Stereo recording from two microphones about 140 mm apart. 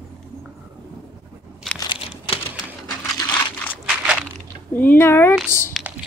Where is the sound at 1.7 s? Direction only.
35° left (ahead or behind).